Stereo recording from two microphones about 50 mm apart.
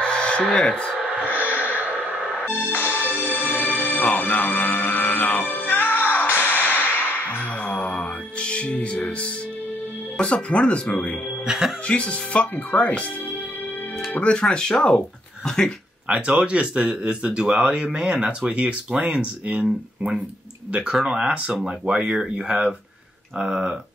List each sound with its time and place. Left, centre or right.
0.0 s a sound: centre
0.5 s speech: left
1.5 s snort: left
2.4 s music: left
8.8 s speech: left
11.4 s speech: centre
11.9 s speech: left
14.2 s speech: centre
16.1 s speech: centre